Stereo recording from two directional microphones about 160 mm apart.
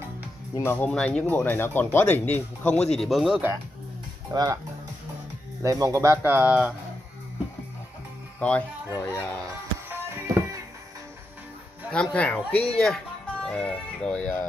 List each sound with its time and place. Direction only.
0.7 s speech: 10° left (ahead or behind)
4.3 s speech: 25° right (ahead or behind)
5.6 s speech: 20° right (ahead or behind)
8.4 s speech: 10° left (ahead or behind)
9.8 s music: 15° right (ahead or behind)
11.9 s speech: 5° left (ahead or behind)